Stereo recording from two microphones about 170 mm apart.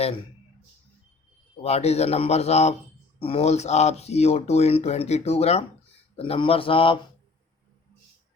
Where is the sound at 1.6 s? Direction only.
40° left (ahead or behind).